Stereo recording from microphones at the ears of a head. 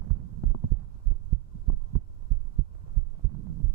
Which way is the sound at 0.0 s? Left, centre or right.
Right.